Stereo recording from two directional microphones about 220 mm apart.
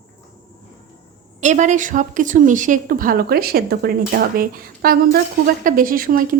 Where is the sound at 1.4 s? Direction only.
35° right (ahead or behind).